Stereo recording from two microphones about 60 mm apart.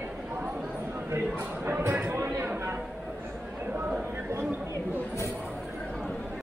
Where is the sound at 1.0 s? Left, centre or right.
Right.